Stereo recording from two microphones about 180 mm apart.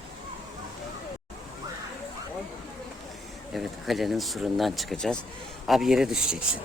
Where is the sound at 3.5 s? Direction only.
Centre (ahead or behind).